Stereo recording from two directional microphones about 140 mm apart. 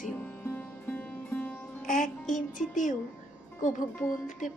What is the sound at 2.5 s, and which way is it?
Speech, 65° left (ahead or behind).